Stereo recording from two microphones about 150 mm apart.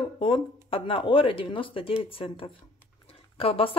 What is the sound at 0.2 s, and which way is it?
Speech, 35° left (ahead or behind).